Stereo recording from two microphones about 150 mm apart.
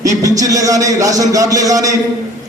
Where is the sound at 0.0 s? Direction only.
25° right (ahead or behind).